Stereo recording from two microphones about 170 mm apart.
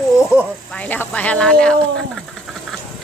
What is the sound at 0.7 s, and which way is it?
Speech, 10° left (ahead or behind).